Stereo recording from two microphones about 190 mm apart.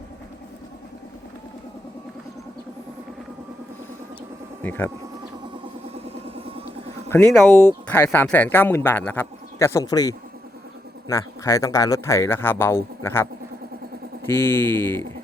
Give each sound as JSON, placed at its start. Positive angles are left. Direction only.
{"t": 4.6, "sound": "speech", "side_deg": 10}
{"t": 6.1, "sound": "vehicle", "side_deg": -30}
{"t": 7.1, "sound": "speech", "side_deg": 10}
{"t": 14.3, "sound": "speech", "side_deg": 10}